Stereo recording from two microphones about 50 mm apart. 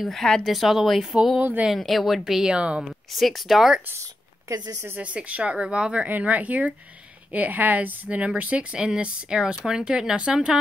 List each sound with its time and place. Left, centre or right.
0.0 s a woman's voice: centre
0.4 s speech: centre
2.5 s a woman's voice: right
3.1 s speech: centre
4.5 s speech: right
4.9 s a woman's voice: right
6.0 s a woman's voice: right
8.7 s speech: centre